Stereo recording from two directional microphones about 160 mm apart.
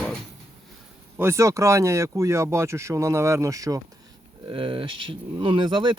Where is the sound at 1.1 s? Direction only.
15° right (ahead or behind).